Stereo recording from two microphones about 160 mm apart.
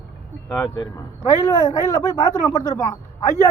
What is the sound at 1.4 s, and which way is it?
Speech, 20° left (ahead or behind).